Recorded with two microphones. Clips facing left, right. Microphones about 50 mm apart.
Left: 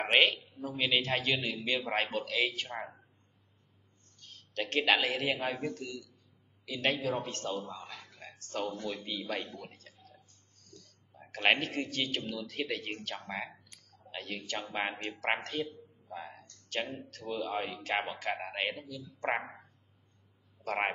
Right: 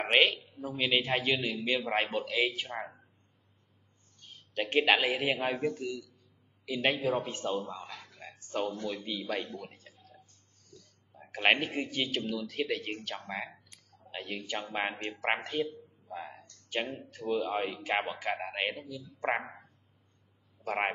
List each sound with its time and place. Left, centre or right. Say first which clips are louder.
0.0 s a man's voice: right 1 dB; centre
4.2 s a man's voice: right 2 dB; centre
7.8 s a sound: right 2 dB; centre
8.4 s speech: right 3 dB; centre
8.6 s speech: right 2 dB; centre
10.7 s a sound: even; centre
12.1 s a man's voice: right 3 dB; centre
16.1 s a sound: right 2 dB; centre
17.2 s a man's voice: right 4 dB; centre
20.6 s speech: right 1 dB; centre